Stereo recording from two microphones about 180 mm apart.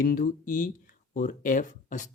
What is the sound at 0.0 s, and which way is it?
Speech, 50° left (ahead or behind).